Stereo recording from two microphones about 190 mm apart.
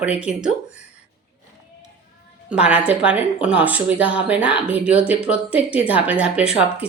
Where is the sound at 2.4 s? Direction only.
5° right (ahead or behind).